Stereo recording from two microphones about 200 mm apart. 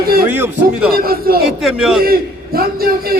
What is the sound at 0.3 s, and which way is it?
Speech, 10° right (ahead or behind).